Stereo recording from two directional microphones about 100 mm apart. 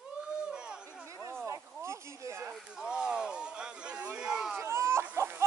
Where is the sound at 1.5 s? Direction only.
30° right (ahead or behind).